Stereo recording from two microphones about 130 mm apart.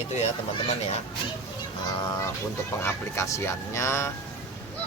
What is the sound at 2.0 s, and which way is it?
Speech, 30° left (ahead or behind).